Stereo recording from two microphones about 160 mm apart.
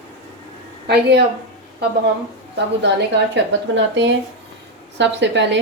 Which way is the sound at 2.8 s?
90° right.